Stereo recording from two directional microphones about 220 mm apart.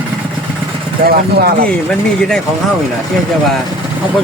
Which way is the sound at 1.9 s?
5° left (ahead or behind).